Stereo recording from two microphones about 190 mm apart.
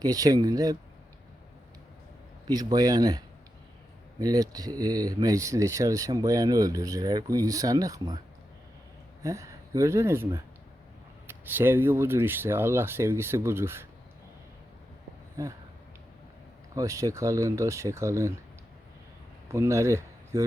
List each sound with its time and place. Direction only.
0.0 s speech: 20° right (ahead or behind)
2.5 s speech: 20° right (ahead or behind)
9.2 s speech: 15° right (ahead or behind)
16.7 s speech: 15° right (ahead or behind)
19.5 s speech: 15° right (ahead or behind)